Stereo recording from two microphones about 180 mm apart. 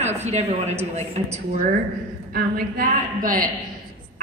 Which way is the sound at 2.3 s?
55° right (ahead or behind).